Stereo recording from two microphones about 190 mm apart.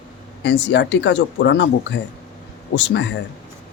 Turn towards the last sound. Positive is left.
turn(degrees=70)  # may be behind; listen again after turning